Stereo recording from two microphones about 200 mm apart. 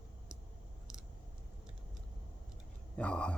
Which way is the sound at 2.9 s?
5° left (ahead or behind).